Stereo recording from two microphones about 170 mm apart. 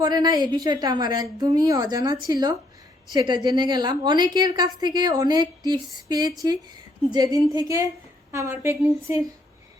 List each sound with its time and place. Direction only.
0.0 s a woman's voice: 25° right (ahead or behind)